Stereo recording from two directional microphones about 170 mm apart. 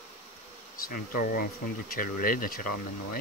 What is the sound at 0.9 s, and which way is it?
Speech, 55° left (ahead or behind).